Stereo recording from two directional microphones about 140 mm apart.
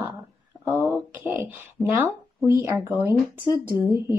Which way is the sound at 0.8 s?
15° right (ahead or behind).